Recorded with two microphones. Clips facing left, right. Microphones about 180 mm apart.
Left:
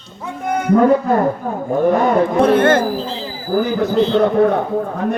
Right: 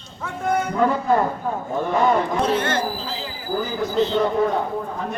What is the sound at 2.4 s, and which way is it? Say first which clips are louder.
Speech: left 9 dB; 55° left (ahead or behind).